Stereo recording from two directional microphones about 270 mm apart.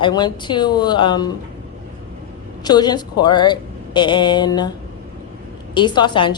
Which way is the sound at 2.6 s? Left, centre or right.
Centre.